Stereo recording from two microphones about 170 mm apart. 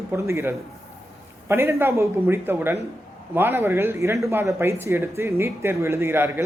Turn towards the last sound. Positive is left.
turn(degrees=-15)  # may be behind; listen again after turning